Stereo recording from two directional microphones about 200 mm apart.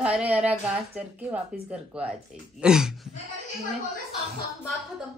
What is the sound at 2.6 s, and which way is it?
Speech, 5° right (ahead or behind).